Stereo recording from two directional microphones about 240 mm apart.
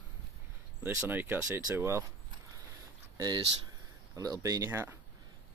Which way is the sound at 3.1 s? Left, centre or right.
Centre.